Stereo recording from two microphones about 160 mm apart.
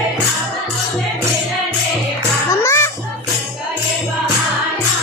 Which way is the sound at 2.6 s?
15° left (ahead or behind).